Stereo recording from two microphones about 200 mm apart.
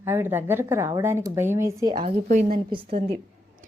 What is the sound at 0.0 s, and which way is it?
Speech, 10° right (ahead or behind).